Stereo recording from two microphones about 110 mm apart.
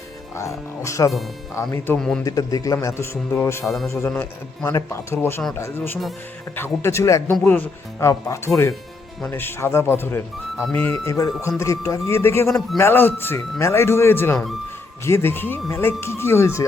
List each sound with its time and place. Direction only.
0.3 s speech: 30° left (ahead or behind)
2.0 s speech: 10° left (ahead or behind)
2.2 s a man's voice: 35° left (ahead or behind)